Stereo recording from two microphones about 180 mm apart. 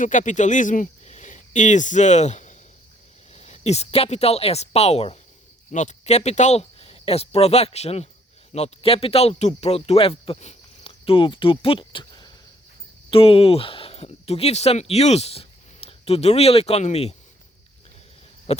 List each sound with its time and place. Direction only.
0.0 s speech: 45° left (ahead or behind)